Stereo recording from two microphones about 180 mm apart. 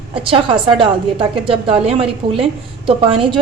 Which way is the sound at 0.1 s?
30° right (ahead or behind).